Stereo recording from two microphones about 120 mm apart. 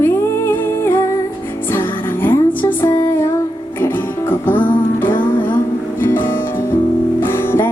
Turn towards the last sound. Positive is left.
turn(degrees=20)  # may be behind; listen again after turning